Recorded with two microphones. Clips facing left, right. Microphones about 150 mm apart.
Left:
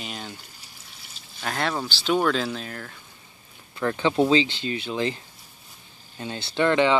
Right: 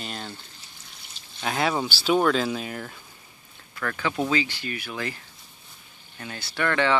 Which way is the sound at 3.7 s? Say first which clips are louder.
Left 5 dB; 25° left (ahead or behind).